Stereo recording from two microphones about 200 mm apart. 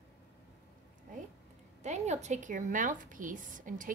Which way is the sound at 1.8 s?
35° right (ahead or behind).